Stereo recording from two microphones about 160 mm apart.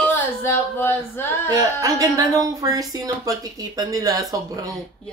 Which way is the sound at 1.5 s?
20° right (ahead or behind).